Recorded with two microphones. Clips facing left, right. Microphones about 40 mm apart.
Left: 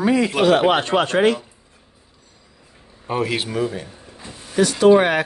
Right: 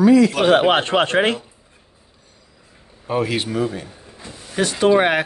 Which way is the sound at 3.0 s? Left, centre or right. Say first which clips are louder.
Right 1 dB; centre.